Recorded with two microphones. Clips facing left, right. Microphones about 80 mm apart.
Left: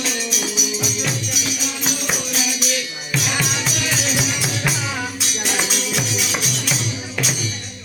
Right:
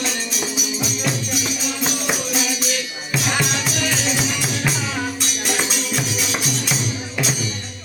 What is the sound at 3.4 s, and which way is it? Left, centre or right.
Music, centre.